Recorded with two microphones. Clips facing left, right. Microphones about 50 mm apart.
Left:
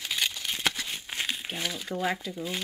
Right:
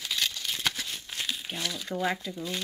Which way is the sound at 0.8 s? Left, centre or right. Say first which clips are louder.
Left 2 dB; left.